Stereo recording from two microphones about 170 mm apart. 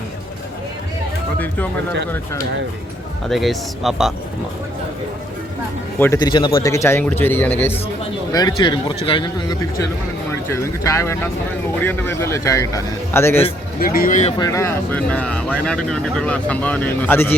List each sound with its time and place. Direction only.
3.2 s speech: centre (ahead or behind)
6.1 s a man's voice: 25° left (ahead or behind)
8.3 s a man's voice: 25° left (ahead or behind)
10.5 s speech: 15° left (ahead or behind)
13.7 s speech: 60° left (ahead or behind)
14.3 s speech: 20° left (ahead or behind)